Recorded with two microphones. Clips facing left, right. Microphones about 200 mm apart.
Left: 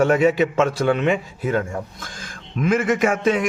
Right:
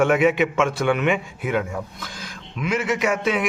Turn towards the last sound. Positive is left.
turn(degrees=45)  # may be behind; listen again after turning